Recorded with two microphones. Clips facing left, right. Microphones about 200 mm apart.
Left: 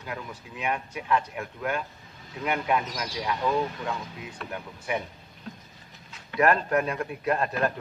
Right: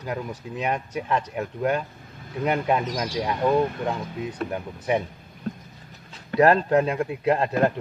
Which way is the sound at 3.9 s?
40° right (ahead or behind).